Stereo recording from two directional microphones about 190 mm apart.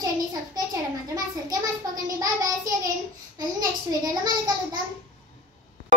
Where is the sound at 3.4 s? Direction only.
20° right (ahead or behind).